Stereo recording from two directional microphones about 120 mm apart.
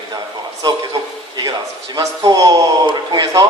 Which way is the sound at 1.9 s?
30° right (ahead or behind).